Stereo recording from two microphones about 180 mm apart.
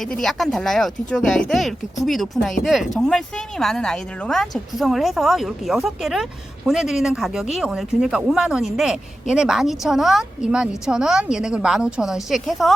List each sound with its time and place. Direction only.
0.0 s a woman's voice: centre (ahead or behind)